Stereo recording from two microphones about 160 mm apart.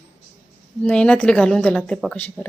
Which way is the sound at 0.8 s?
5° left (ahead or behind).